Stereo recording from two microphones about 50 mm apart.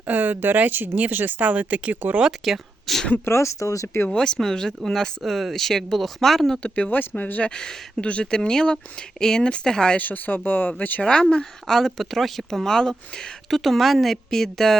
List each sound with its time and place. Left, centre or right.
0.1 s speech: right
2.4 s speech: centre
3.2 s speech: left
4.1 s speech: centre
6.6 s speech: left
6.9 s speech: left
7.4 s speech: centre
10.0 s speech: left
11.0 s speech: centre
11.6 s speech: centre